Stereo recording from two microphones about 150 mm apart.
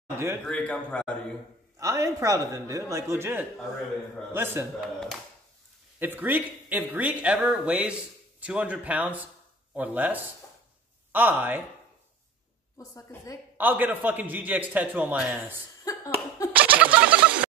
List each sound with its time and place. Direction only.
0.5 s a man's voice: 5° left (ahead or behind)
1.8 s a man's voice: 20° right (ahead or behind)
4.7 s speech: centre (ahead or behind)
5.9 s speech: 15° right (ahead or behind)
12.7 s a woman's voice: 20° left (ahead or behind)
13.6 s speech: 10° right (ahead or behind)
15.8 s cough: 20° left (ahead or behind)
16.5 s a sound: 10° right (ahead or behind)